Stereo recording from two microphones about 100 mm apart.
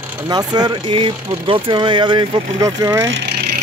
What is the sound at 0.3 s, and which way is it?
Speech, 40° right (ahead or behind).